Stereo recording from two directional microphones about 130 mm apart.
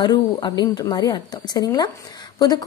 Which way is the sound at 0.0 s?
35° left (ahead or behind).